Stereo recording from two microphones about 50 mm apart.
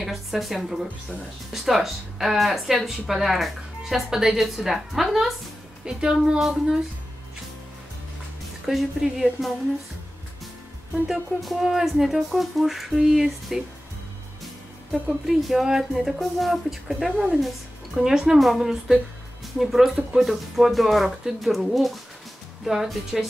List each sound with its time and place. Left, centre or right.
0.0 s speech: centre
5.9 s speech: centre
8.6 s speech: centre
11.1 s speech: centre
15.2 s speech: centre